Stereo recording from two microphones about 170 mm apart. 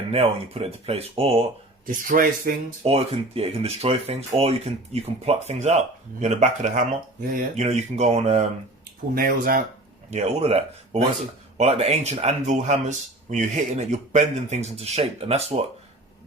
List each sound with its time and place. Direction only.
0.1 s speech: 35° right (ahead or behind)
1.9 s speech: 55° right (ahead or behind)
2.8 s speech: 35° right (ahead or behind)
9.1 s speech: 55° right (ahead or behind)
10.1 s speech: 40° right (ahead or behind)